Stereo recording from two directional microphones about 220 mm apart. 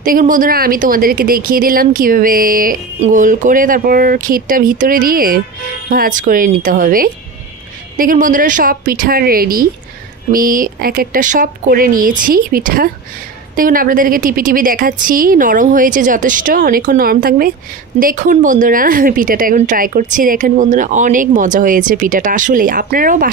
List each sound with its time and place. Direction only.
0.0 s speech: 40° right (ahead or behind)